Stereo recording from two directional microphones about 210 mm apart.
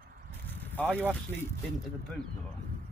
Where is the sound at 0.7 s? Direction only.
10° left (ahead or behind).